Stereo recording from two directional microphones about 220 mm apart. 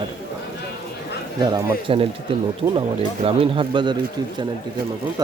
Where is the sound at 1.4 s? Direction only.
15° right (ahead or behind).